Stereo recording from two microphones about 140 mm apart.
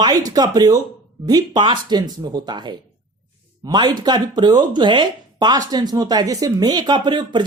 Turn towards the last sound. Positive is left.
turn(degrees=-30)  # may be behind; listen again after turning